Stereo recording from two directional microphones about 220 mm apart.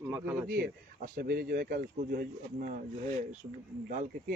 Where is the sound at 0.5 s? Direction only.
40° right (ahead or behind).